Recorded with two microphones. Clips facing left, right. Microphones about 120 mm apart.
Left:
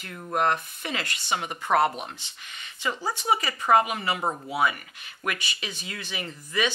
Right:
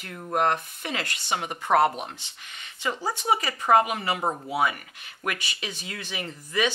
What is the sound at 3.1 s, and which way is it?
Speech, 45° right (ahead or behind).